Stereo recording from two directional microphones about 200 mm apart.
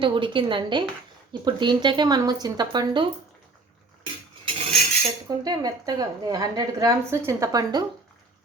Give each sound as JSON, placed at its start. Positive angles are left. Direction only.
{"t": 0.0, "sound": "speech", "side_deg": -25}
{"t": 4.4, "sound": "cutlery", "side_deg": -30}
{"t": 5.3, "sound": "a woman's voice", "side_deg": -20}